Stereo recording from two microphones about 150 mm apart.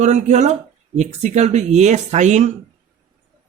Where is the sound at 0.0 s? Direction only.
50° right (ahead or behind).